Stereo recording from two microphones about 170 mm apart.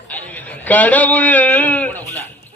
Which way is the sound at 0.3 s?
10° left (ahead or behind).